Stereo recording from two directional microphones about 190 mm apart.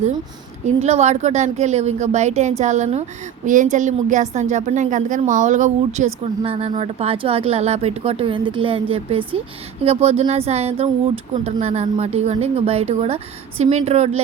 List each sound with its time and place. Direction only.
0.9 s speech: 35° right (ahead or behind)